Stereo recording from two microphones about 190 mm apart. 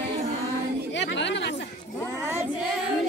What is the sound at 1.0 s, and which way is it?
Chatter, 70° left (ahead or behind).